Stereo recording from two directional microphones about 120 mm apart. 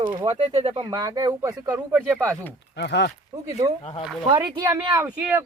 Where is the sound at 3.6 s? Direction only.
30° right (ahead or behind).